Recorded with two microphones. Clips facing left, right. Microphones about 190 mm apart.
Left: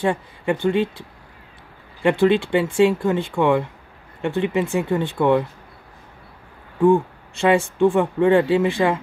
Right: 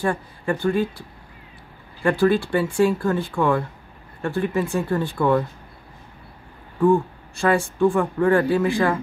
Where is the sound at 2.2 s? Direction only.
20° left (ahead or behind).